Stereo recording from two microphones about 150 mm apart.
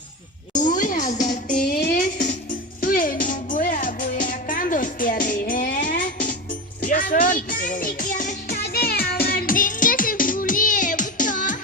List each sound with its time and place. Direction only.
0.5 s music: 60° left (ahead or behind)
1.6 s music: 85° left; by 11.5 s 60° left (ahead or behind)